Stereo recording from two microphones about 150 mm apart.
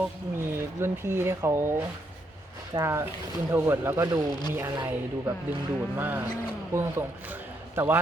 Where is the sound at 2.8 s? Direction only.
20° right (ahead or behind).